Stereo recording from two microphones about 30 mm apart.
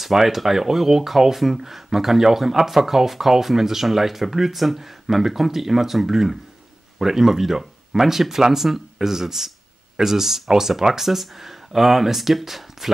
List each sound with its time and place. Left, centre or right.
0.0 s speech: centre
11.1 s speech: centre